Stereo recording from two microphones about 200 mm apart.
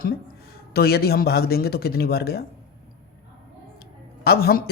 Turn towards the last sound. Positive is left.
turn(degrees=50)  # may be behind; listen again after turning